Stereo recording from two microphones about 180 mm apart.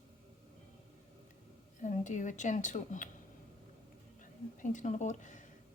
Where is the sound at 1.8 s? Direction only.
45° left (ahead or behind).